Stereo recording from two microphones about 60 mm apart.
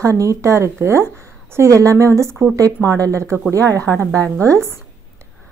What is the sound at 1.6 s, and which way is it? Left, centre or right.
Speech, right.